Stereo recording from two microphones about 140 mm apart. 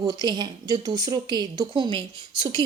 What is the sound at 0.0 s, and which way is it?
A woman's voice, 30° right (ahead or behind).